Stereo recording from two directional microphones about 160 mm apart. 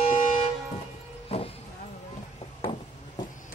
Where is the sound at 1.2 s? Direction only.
40° left (ahead or behind).